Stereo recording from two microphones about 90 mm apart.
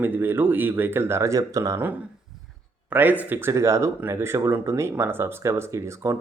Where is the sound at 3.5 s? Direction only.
35° right (ahead or behind).